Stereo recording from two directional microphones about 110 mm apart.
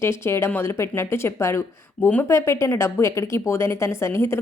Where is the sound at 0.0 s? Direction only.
25° left (ahead or behind).